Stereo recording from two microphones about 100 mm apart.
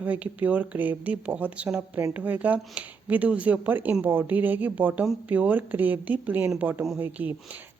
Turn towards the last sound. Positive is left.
turn(degrees=-15)  # may be behind; listen again after turning